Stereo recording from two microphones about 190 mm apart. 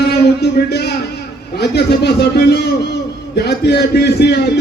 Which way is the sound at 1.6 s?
60° left (ahead or behind).